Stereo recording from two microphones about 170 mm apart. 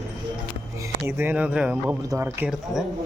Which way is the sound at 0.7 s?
15° right (ahead or behind).